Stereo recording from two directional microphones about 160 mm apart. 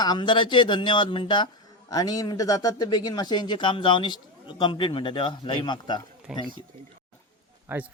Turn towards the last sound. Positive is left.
turn(degrees=-10)  # may be behind; listen again after turning